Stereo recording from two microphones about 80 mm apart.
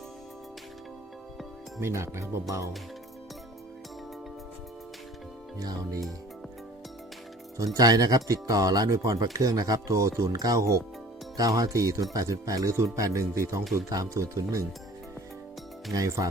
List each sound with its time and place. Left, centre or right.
1.8 s speech: right
5.5 s speech: right
7.5 s speech: right
15.9 s speech: right